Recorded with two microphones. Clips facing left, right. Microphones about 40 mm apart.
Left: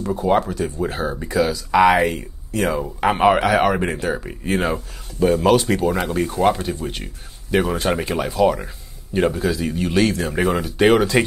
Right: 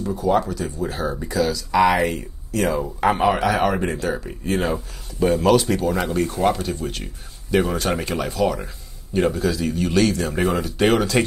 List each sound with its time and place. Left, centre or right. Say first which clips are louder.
0.0 s speech: left 1 dB; left; by 2.8 s centre
3.2 s speech: left 7 dB; left; by 11.2 s centre